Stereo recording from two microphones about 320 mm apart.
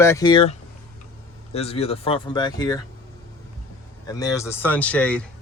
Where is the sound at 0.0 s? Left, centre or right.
Centre.